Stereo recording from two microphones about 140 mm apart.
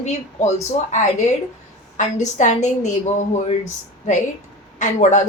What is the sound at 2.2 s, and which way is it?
A woman's voice, 60° left (ahead or behind).